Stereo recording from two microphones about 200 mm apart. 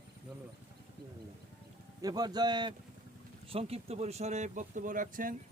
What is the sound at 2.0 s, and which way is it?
Speech, 20° right (ahead or behind).